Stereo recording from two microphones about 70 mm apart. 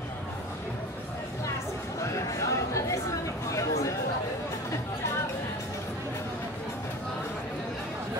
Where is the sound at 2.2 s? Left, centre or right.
Left.